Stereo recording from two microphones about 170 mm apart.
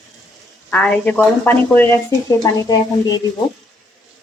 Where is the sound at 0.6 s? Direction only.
5° left (ahead or behind).